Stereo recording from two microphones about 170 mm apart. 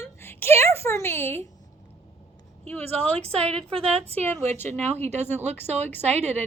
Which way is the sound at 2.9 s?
35° right (ahead or behind).